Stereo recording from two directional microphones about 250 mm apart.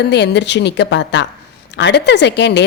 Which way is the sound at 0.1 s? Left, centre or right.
Left.